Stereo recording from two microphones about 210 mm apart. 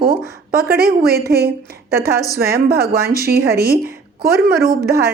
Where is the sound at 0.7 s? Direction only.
45° right (ahead or behind).